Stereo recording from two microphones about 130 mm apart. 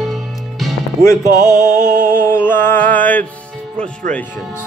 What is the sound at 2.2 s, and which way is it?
Mantra, 15° left (ahead or behind).